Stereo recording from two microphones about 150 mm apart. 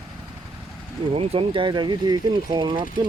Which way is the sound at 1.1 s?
35° right (ahead or behind).